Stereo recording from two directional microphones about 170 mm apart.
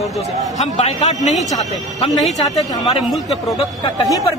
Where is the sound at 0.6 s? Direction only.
45° left (ahead or behind).